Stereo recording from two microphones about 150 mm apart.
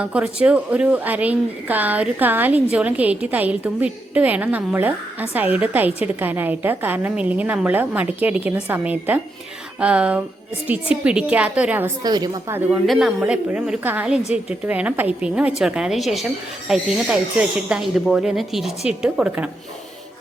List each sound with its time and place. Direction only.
0.0 s a woman's voice: 10° right (ahead or behind)
12.0 s a woman's voice: 25° right (ahead or behind)
12.8 s a woman's voice: centre (ahead or behind)